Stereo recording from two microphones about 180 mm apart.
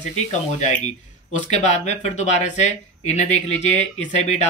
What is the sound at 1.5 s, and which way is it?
Speech, 40° left (ahead or behind).